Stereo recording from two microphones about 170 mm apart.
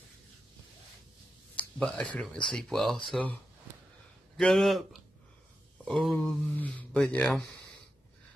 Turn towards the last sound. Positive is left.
turn(degrees=5)  # may be behind; listen again after turning